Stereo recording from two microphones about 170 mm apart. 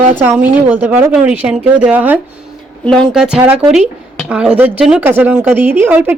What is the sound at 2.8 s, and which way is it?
A woman's voice, 5° left (ahead or behind).